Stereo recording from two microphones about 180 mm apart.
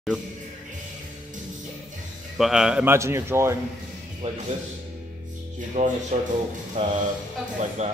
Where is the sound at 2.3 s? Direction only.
5° right (ahead or behind).